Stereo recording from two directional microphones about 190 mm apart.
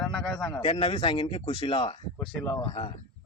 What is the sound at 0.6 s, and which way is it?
Speech, 25° left (ahead or behind).